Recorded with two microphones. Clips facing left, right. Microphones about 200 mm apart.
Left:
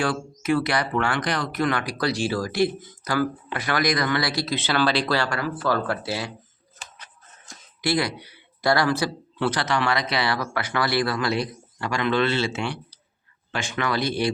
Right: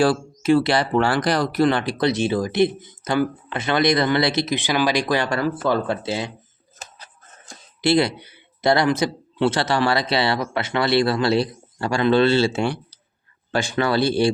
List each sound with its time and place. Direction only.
0.0 s speech: 30° right (ahead or behind)
6.7 s speech: 35° right (ahead or behind)